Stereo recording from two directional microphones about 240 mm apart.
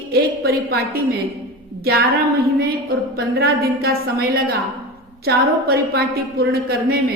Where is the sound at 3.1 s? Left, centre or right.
Right.